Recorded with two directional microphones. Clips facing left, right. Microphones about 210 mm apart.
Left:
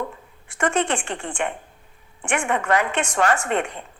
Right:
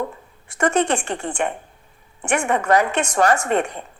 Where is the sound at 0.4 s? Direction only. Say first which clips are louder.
Right 3 dB; 40° right (ahead or behind).